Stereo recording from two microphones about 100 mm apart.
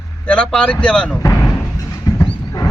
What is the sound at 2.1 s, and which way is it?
Horse, 40° left (ahead or behind).